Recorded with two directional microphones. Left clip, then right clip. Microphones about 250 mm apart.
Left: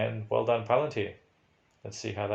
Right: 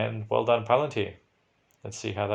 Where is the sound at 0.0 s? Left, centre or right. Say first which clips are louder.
Right 2 dB; right.